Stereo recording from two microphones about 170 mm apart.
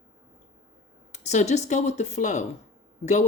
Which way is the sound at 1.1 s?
40° left (ahead or behind).